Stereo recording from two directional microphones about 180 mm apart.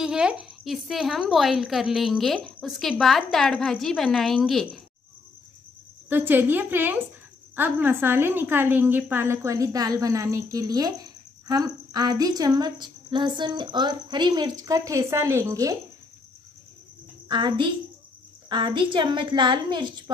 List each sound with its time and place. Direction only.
0.0 s a woman's voice: 5° right (ahead or behind)
6.0 s a woman's voice: 10° right (ahead or behind)
17.3 s a woman's voice: 25° right (ahead or behind)